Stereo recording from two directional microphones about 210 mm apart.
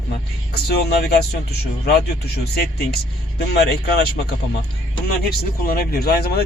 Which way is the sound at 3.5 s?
50° left (ahead or behind).